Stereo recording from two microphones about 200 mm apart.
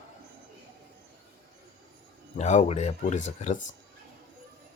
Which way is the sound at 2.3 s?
35° left (ahead or behind).